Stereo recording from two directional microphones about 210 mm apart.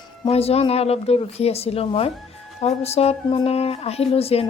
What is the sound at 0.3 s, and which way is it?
A woman's voice, 30° left (ahead or behind).